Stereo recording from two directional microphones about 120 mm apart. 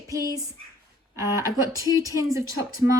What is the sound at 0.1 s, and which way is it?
Speech, 25° right (ahead or behind).